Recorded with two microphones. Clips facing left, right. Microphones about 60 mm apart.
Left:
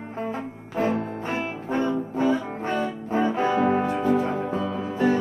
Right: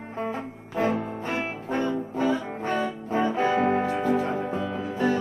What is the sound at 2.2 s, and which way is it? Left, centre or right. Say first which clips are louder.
Music: left 2 dB; left.